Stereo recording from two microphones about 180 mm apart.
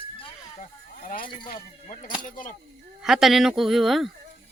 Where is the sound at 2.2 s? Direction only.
45° left (ahead or behind).